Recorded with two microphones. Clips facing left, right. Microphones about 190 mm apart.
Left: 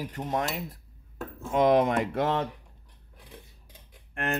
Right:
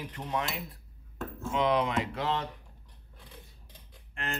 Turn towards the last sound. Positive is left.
turn(degrees=65)  # may be behind; listen again after turning